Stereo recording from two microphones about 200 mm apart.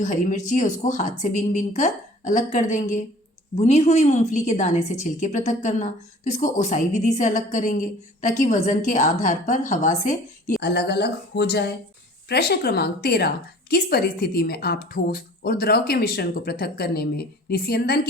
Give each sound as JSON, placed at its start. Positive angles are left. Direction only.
{"t": 0.0, "sound": "a woman's voice", "side_deg": 40}
{"t": 10.6, "sound": "a woman's voice", "side_deg": 55}